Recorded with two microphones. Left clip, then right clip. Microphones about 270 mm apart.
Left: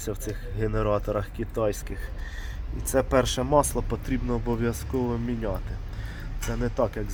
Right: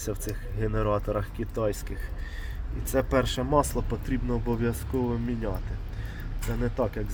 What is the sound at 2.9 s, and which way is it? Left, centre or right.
Speech, centre.